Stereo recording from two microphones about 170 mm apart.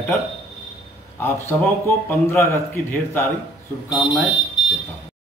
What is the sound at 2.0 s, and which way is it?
A man's voice, 15° left (ahead or behind).